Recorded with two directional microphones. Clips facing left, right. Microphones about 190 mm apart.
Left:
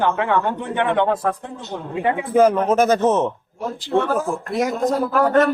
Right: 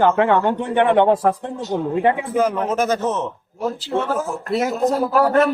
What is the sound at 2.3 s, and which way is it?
Speech, 40° left (ahead or behind).